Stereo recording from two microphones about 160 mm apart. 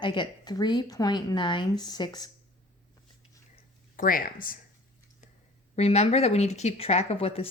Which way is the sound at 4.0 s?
60° left (ahead or behind).